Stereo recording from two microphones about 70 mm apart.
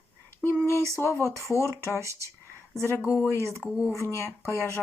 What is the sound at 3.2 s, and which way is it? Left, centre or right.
Speech, left.